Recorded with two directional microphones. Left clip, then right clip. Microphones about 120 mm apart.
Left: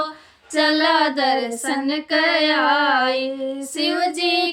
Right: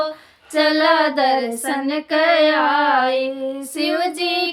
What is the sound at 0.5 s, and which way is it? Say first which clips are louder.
Female singing: right 2 dB; 15° left (ahead or behind).